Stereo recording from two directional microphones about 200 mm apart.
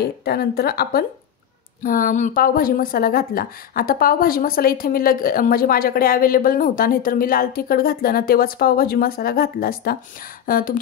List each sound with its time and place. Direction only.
0.0 s speech: 50° left (ahead or behind)